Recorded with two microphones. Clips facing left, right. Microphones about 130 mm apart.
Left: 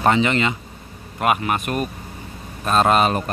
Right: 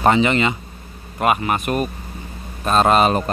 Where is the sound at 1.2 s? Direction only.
Centre (ahead or behind).